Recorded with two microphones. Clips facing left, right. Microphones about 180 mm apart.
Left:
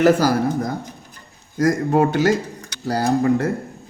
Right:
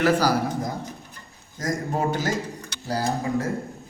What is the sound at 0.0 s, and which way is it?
Speech, 50° left (ahead or behind).